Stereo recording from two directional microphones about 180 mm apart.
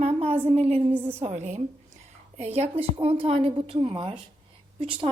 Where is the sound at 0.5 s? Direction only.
35° right (ahead or behind).